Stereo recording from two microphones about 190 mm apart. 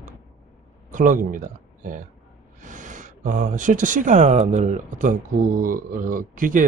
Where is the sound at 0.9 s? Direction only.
45° right (ahead or behind).